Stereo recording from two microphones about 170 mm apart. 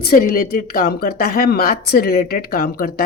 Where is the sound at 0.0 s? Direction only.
65° left (ahead or behind).